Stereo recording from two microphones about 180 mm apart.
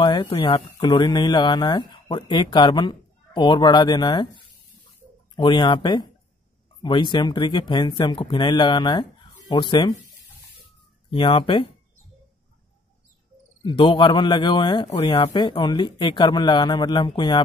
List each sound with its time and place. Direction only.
0.0 s speech: 25° left (ahead or behind)
5.3 s speech: 25° left (ahead or behind)
11.1 s speech: 30° left (ahead or behind)
13.7 s speech: 30° left (ahead or behind)